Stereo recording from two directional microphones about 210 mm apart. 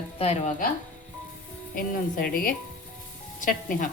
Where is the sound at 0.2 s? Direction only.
30° left (ahead or behind).